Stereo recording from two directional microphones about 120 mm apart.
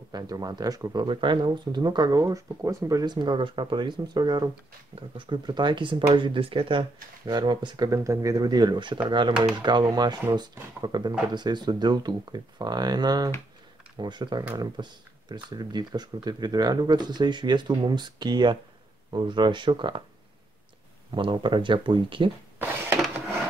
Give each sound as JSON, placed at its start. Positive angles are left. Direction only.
{"t": 0.1, "sound": "speech", "side_deg": -35}
{"t": 21.1, "sound": "speech", "side_deg": -45}